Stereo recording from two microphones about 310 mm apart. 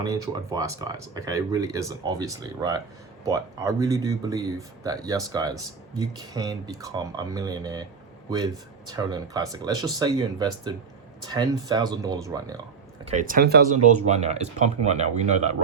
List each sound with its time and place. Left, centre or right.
0.0 s speech: centre
8.9 s speech: centre
13.1 s speech: right